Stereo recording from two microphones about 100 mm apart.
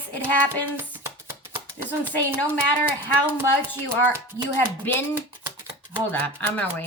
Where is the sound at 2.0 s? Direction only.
20° left (ahead or behind).